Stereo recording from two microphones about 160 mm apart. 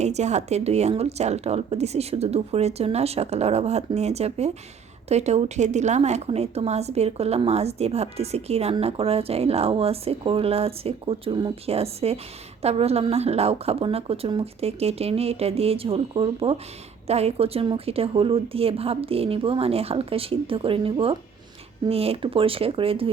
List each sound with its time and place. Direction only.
0.0 s a woman's voice: 45° right (ahead or behind)